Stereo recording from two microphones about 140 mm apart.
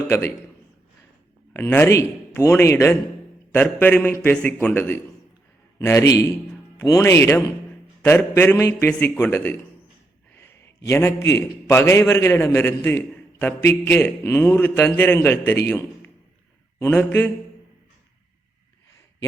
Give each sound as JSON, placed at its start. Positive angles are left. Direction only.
{"t": 0.1, "sound": "speech", "side_deg": 20}
{"t": 1.5, "sound": "a man's voice", "side_deg": 15}
{"t": 17.1, "sound": "a man's voice", "side_deg": 15}